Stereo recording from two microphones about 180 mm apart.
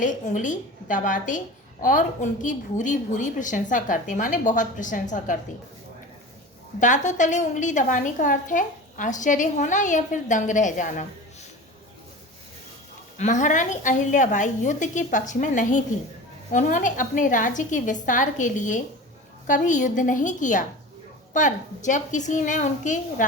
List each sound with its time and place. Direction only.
0.0 s a woman's voice: 45° left (ahead or behind)
6.7 s a woman's voice: 45° left (ahead or behind)
13.1 s a woman's voice: 40° left (ahead or behind)